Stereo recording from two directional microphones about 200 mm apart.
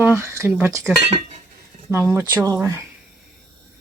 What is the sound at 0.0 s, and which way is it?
Speech, 10° right (ahead or behind).